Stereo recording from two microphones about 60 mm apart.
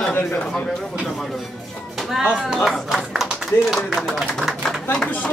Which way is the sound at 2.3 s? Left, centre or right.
Centre.